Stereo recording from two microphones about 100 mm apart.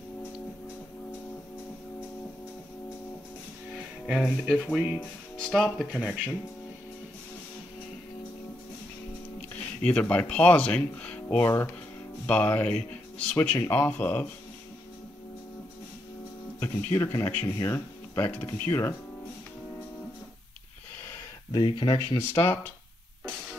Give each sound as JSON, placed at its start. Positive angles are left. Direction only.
{"t": 3.7, "sound": "speech", "side_deg": -5}
{"t": 5.9, "sound": "speech", "side_deg": -10}
{"t": 9.6, "sound": "speech", "side_deg": 10}
{"t": 16.5, "sound": "speech", "side_deg": 20}
{"t": 21.5, "sound": "speech", "side_deg": 50}
{"t": 22.3, "sound": "speech", "side_deg": 20}